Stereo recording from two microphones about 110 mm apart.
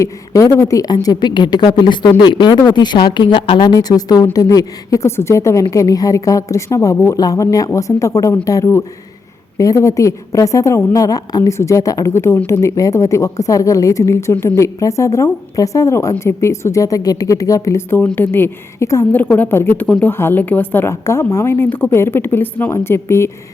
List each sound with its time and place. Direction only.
0.0 s a woman's voice: 30° left (ahead or behind)
19.1 s a woman's voice: 15° left (ahead or behind)